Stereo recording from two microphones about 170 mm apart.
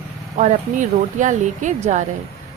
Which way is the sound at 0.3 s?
45° right (ahead or behind).